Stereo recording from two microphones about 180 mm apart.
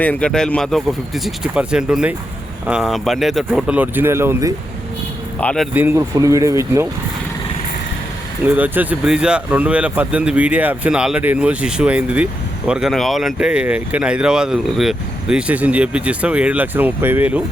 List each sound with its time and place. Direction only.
0.0 s speech: 10° left (ahead or behind); by 4.5 s 15° right (ahead or behind)
5.4 s speech: 5° left (ahead or behind)
5.7 s speech: 10° right (ahead or behind)
8.4 s speech: 10° right (ahead or behind)